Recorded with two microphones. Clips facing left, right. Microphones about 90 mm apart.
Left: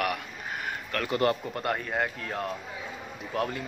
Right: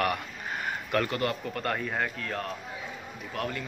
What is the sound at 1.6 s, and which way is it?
A man's voice, 15° left (ahead or behind).